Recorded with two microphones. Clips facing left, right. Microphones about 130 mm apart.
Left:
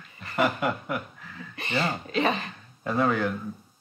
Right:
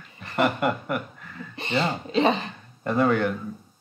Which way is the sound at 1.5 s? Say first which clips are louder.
Right 3 dB; 25° right (ahead or behind).